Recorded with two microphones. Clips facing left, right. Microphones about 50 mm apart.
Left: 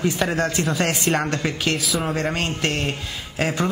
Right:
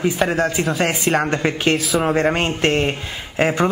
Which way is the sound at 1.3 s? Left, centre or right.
Right.